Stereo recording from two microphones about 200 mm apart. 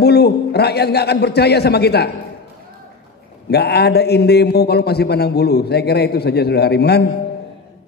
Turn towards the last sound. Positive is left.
turn(degrees=55)  # may be behind; listen again after turning